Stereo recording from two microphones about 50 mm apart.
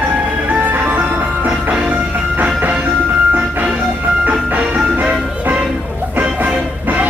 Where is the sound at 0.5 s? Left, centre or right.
Right.